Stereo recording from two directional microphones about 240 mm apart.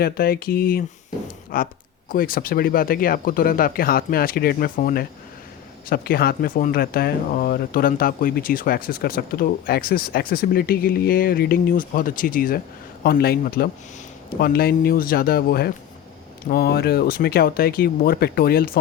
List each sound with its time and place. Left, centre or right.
0.0 s speech: left